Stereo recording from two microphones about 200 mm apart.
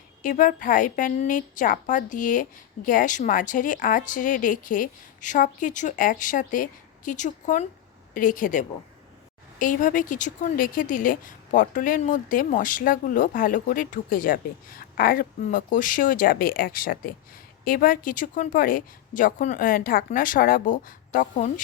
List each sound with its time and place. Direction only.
0.2 s a woman's voice: 40° left (ahead or behind)